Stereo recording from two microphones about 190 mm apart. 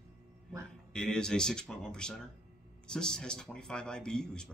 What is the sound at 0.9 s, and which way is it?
A man's voice, 5° left (ahead or behind).